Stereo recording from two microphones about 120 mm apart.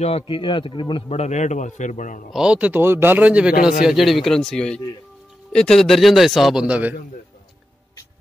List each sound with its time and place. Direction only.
0.0 s a man's voice: 50° left (ahead or behind)
1.1 s a man's voice: 70° left (ahead or behind); by 2.2 s 90° left
2.3 s a man's voice: 10° right (ahead or behind)